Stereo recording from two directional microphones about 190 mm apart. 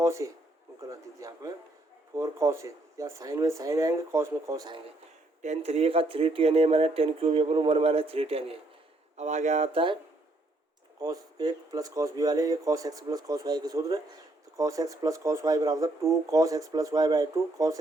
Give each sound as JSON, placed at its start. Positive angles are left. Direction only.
{"t": 0.0, "sound": "speech", "side_deg": -15}
{"t": 5.4, "sound": "speech", "side_deg": -35}
{"t": 11.0, "sound": "speech", "side_deg": -20}